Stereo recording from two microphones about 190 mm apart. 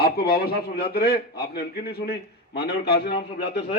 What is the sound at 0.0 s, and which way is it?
A man's voice, 55° left (ahead or behind).